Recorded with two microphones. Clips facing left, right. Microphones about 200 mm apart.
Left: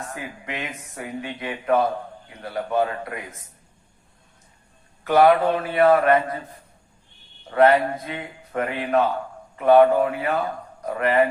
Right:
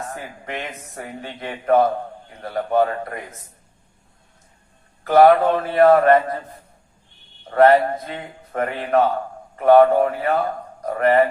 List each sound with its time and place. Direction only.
0.1 s a man's voice: 45° right (ahead or behind)
5.1 s speech: 45° right (ahead or behind)
7.5 s a man's voice: 45° right (ahead or behind)